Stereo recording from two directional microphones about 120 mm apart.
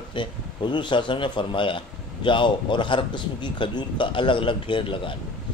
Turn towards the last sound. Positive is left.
turn(degrees=45)  # may be behind; listen again after turning